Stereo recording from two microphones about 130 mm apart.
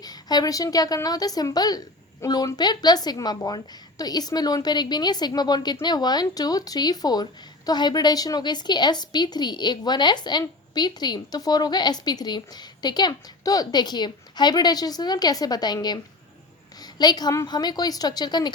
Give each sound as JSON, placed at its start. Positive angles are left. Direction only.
{"t": 0.0, "sound": "a woman's voice", "side_deg": 30}